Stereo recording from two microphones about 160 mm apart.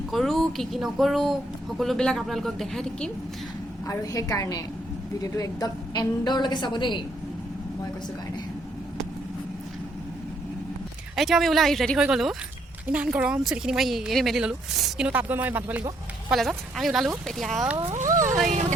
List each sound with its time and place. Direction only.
0.1 s a woman's voice: centre (ahead or behind)
3.8 s a woman's voice: 20° left (ahead or behind)
11.1 s a woman's voice: centre (ahead or behind)
16.3 s a woman's voice: centre (ahead or behind)
17.9 s speech: 55° right (ahead or behind)